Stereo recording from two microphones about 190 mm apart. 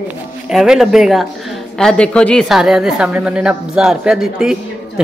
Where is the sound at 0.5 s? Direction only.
Centre (ahead or behind).